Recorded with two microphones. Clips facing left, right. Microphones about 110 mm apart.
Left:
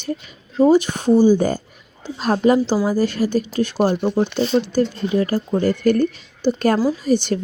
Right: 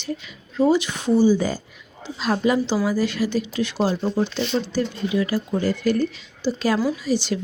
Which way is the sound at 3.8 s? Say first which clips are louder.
Left 4 dB; 15° left (ahead or behind).